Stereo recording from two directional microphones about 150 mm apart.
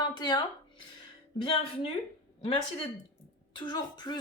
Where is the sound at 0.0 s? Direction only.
30° left (ahead or behind).